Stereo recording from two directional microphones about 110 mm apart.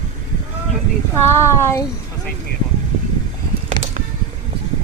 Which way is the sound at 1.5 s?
25° left (ahead or behind).